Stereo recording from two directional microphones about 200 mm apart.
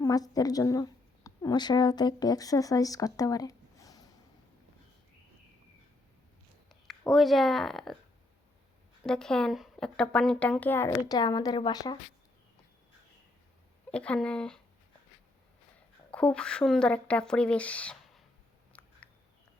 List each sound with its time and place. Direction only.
0.0 s a woman's voice: 20° left (ahead or behind)
7.0 s speech: centre (ahead or behind)
9.0 s speech: 5° left (ahead or behind); by 11.9 s 20° left (ahead or behind)
13.9 s speech: 5° left (ahead or behind)
16.1 s speech: 5° left (ahead or behind)
18.7 s a sound: 5° left (ahead or behind)